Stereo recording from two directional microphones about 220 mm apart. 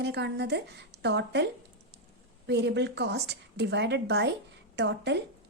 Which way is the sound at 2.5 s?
50° right (ahead or behind).